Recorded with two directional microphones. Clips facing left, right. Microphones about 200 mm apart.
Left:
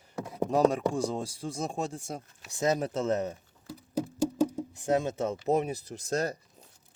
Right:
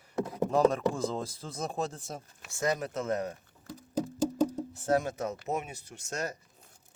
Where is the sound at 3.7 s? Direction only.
10° left (ahead or behind); by 6.3 s 35° left (ahead or behind).